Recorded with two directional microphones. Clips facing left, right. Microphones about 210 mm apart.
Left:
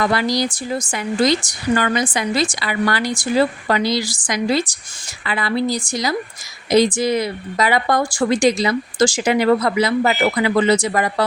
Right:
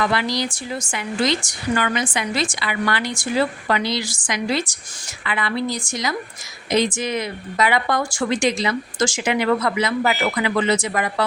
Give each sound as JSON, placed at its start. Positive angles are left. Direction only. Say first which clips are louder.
{"t": 0.0, "sound": "a woman's voice", "louder": "left 3 dB", "side_deg": 40}